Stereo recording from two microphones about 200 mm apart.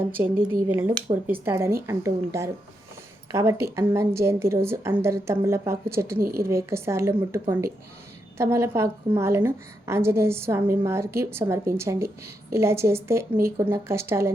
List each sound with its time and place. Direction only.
0.2 s a woman's voice: 10° right (ahead or behind)
6.1 s a woman's voice: 50° right (ahead or behind)
6.4 s a woman's voice: 15° right (ahead or behind)